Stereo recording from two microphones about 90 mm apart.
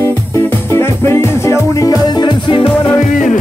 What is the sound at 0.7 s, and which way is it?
Music, 30° left (ahead or behind).